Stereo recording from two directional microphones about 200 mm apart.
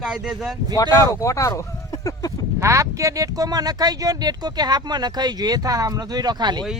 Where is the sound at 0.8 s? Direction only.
15° left (ahead or behind).